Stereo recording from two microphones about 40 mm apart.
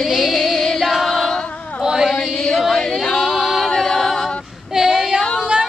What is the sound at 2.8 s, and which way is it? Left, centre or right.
A capella, centre.